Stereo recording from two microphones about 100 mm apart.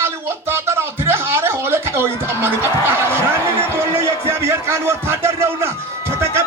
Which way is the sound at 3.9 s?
25° right (ahead or behind).